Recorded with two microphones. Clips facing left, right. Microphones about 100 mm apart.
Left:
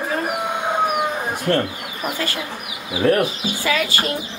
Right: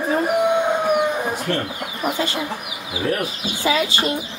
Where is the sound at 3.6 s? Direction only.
25° right (ahead or behind).